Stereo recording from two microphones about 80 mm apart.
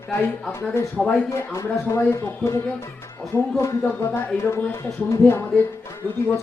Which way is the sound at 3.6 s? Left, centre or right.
Left.